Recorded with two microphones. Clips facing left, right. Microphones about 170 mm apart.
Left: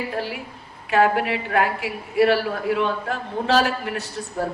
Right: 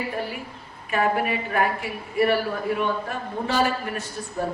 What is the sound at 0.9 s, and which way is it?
A woman's voice, 75° left (ahead or behind).